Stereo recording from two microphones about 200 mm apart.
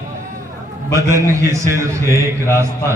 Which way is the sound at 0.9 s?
15° right (ahead or behind).